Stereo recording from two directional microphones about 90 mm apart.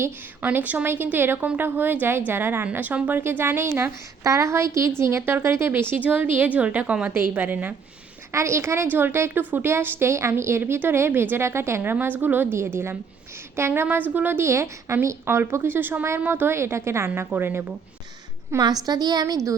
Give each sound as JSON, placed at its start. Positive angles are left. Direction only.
{"t": 0.4, "sound": "a woman's voice", "side_deg": -20}
{"t": 8.3, "sound": "a woman's voice", "side_deg": -30}
{"t": 18.9, "sound": "a woman's voice", "side_deg": -50}